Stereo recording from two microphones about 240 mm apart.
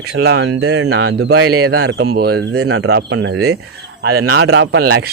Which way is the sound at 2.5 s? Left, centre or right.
Right.